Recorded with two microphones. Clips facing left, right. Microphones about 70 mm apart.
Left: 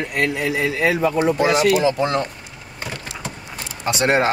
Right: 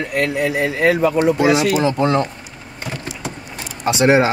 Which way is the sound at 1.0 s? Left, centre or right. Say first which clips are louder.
Right 3 dB; right.